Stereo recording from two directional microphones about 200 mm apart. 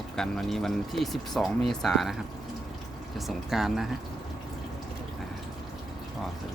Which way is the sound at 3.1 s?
Centre (ahead or behind).